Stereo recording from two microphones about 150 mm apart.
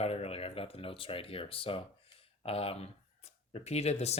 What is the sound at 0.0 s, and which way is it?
Speech, 40° left (ahead or behind).